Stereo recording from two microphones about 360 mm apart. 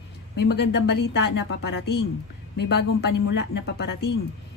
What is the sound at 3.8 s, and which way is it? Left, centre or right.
Speech, left.